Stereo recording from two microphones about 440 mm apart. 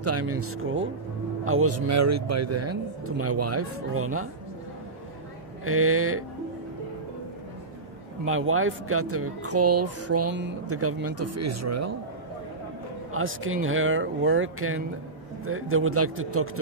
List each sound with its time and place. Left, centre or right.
0.0 s speech: right
5.7 s speech: right
8.3 s speech: right
13.1 s speech: right